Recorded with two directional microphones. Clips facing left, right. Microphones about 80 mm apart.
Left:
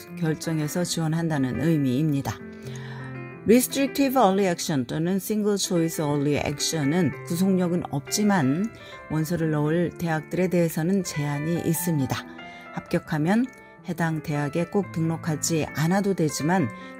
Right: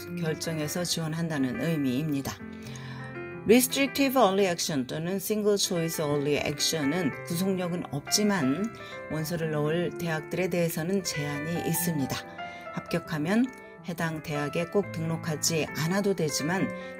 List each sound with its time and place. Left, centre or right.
0.2 s speech: left
3.4 s speech: left